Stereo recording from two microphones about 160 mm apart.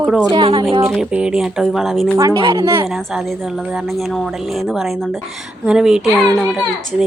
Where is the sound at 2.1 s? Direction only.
25° right (ahead or behind).